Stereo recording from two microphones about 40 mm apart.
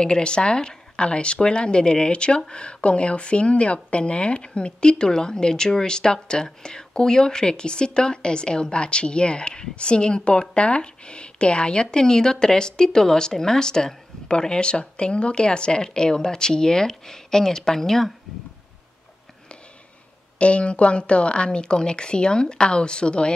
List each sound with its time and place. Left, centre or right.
0.0 s speech: left
20.3 s speech: left